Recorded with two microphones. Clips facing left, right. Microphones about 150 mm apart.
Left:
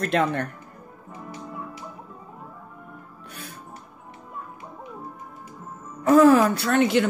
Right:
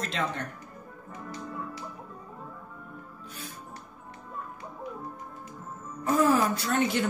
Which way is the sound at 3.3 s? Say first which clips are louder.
Left 3 dB; 65° left (ahead or behind).